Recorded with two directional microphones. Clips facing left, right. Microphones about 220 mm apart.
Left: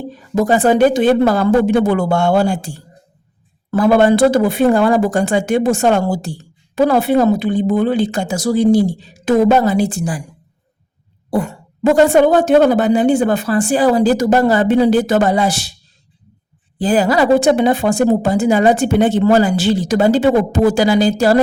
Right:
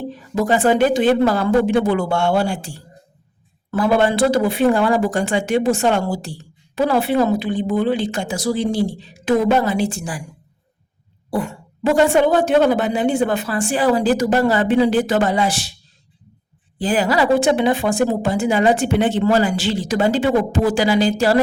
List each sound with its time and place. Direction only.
0.3 s a woman's voice: 40° left (ahead or behind)
3.7 s a woman's voice: 45° left (ahead or behind)
11.3 s speech: 45° left (ahead or behind)
16.8 s speech: 40° left (ahead or behind)